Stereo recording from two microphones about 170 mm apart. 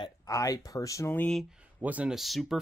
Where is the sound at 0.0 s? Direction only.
20° left (ahead or behind).